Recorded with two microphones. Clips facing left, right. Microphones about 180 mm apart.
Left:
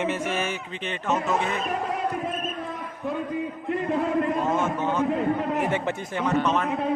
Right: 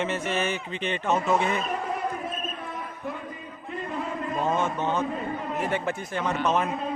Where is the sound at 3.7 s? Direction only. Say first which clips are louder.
Left 8 dB; 70° left (ahead or behind).